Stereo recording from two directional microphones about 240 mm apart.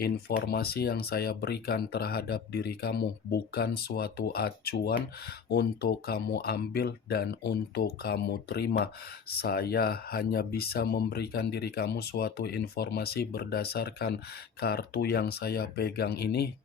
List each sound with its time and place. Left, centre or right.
0.0 s speech: left